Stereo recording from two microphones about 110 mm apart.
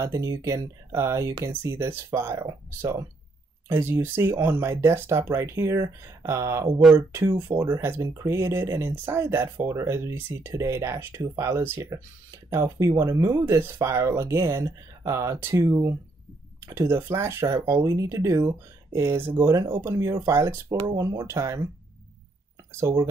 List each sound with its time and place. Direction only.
0.0 s speech: 30° right (ahead or behind)
22.8 s speech: 25° right (ahead or behind)